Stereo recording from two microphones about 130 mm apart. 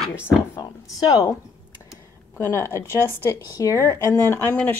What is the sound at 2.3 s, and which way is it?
A woman's voice, 20° left (ahead or behind).